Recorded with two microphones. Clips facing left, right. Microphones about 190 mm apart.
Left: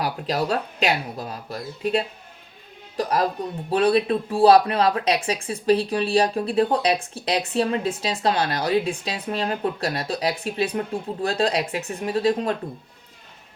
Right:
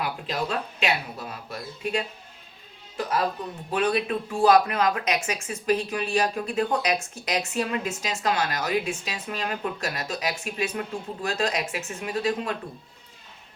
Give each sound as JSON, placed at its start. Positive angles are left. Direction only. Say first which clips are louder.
{"t": 0.0, "sound": "a woman's voice", "louder": "left 5 dB", "side_deg": 40}